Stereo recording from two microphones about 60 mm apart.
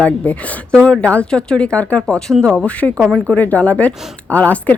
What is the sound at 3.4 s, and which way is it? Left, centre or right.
A woman's voice, left.